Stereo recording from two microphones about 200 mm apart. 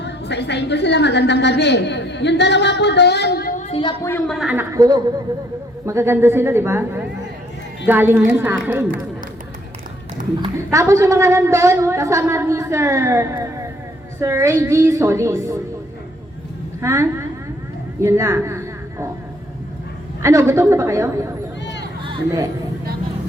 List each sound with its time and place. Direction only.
0.0 s a woman's voice: 60° left (ahead or behind); by 3.9 s 30° left (ahead or behind)
4.0 s a woman's voice: 10° left (ahead or behind)
4.4 s a woman's voice: 10° right (ahead or behind)
10.7 s a woman's voice: 15° right (ahead or behind)
16.8 s a woman's voice: 15° right (ahead or behind)
20.2 s a woman's voice: 15° right (ahead or behind)
22.0 s a sound: 20° right (ahead or behind)